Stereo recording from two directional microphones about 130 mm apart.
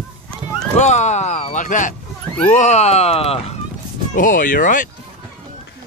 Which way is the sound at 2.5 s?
65° left (ahead or behind).